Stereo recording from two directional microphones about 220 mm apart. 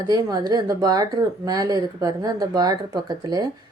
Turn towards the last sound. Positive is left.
turn(degrees=-15)  # may be behind; listen again after turning